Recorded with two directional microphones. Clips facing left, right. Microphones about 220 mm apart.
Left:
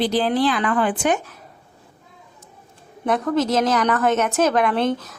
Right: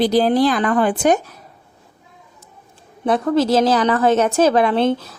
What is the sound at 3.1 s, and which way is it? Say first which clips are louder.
A woman's voice: right 4 dB; 30° right (ahead or behind).